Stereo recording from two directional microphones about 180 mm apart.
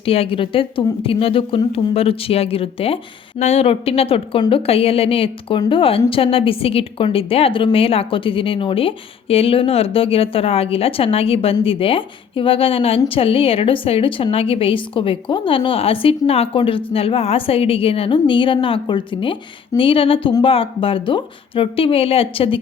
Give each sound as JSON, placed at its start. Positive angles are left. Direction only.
{"t": 0.0, "sound": "a woman's voice", "side_deg": 30}